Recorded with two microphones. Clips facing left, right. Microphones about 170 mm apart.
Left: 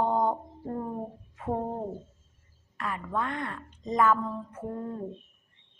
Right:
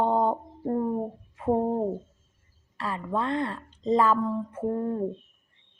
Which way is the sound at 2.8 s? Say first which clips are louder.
Right 3 dB; 30° right (ahead or behind).